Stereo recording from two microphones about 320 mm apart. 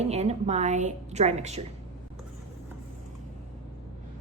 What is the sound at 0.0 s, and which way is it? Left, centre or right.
A woman's voice, centre.